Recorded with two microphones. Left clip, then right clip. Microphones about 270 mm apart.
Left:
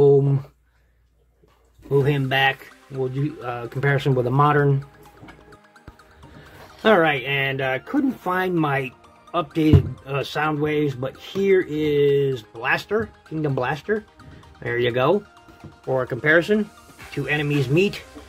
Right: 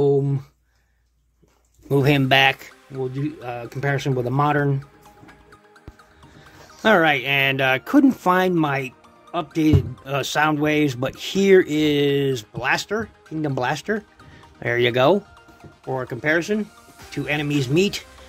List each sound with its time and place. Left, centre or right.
0.0 s a sound: centre
1.9 s speech: right
3.0 s speech: centre
6.8 s speech: right
15.9 s speech: centre